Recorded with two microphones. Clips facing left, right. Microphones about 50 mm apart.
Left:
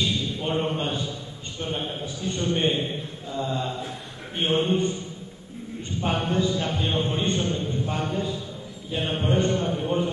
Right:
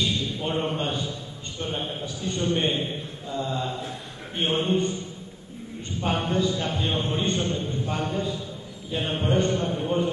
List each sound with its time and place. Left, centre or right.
0.7 s a sound: centre
1.6 s a man's voice: centre
3.3 s mantra: centre
4.4 s a man's voice: centre
5.9 s a man's voice: centre